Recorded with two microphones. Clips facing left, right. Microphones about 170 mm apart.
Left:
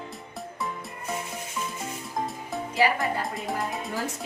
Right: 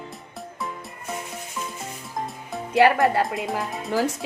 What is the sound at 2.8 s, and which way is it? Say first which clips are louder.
Speech: right 6 dB; 65° right (ahead or behind).